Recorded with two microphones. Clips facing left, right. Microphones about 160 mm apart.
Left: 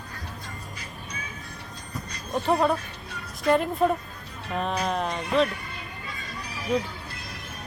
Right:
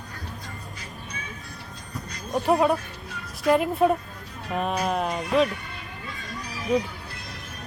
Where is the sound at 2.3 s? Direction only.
10° right (ahead or behind).